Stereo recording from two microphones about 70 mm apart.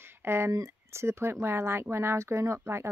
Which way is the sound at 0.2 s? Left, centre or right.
Right.